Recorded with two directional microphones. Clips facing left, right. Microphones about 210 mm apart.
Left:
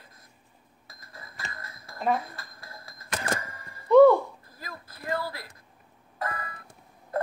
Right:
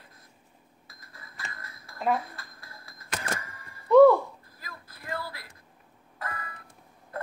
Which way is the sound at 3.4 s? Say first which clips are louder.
Left 4 dB; 40° left (ahead or behind).